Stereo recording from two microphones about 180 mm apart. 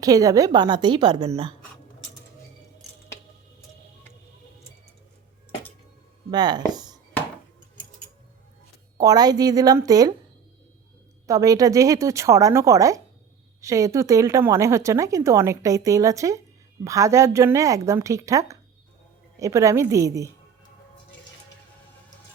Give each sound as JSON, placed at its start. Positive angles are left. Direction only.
{"t": 0.0, "sound": "speech", "side_deg": -20}
{"t": 6.3, "sound": "speech", "side_deg": -25}
{"t": 9.0, "sound": "speech", "side_deg": -20}
{"t": 11.3, "sound": "speech", "side_deg": -20}